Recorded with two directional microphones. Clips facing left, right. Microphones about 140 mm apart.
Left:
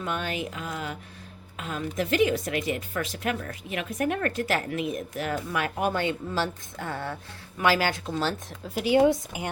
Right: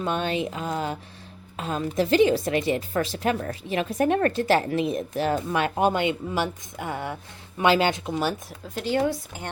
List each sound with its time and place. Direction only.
0.0 s a woman's voice: 25° right (ahead or behind)
8.6 s speech: 10° left (ahead or behind)